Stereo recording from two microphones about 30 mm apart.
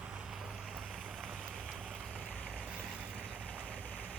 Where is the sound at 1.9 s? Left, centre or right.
Right.